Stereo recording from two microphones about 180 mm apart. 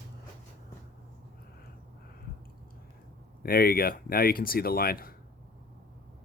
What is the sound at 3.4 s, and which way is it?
Speech, 55° left (ahead or behind).